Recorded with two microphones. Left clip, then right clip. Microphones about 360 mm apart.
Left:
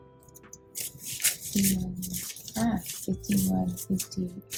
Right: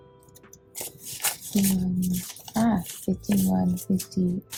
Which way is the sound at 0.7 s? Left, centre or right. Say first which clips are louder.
Even; centre.